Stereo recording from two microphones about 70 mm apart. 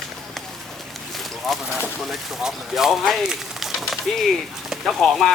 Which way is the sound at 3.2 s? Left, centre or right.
Centre.